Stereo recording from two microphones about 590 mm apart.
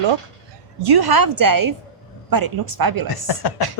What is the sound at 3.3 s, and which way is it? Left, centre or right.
Speech, left.